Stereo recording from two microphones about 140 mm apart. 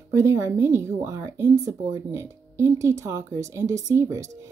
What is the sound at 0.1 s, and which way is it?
A woman's voice, 20° right (ahead or behind).